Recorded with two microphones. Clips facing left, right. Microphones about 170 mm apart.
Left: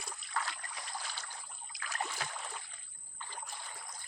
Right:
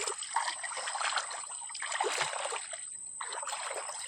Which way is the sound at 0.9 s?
90° right.